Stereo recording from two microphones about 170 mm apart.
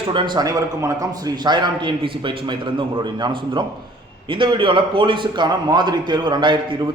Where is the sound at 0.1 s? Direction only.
25° right (ahead or behind).